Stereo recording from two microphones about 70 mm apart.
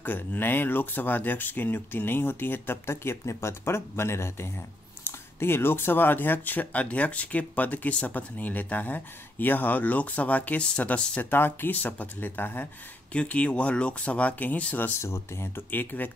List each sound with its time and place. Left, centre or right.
0.0 s speech: left
13.1 s speech: centre
15.0 s speech: left